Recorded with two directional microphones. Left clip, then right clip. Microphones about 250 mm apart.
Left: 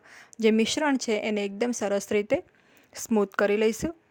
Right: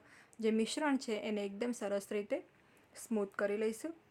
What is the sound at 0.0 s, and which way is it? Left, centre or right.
A woman's voice, left.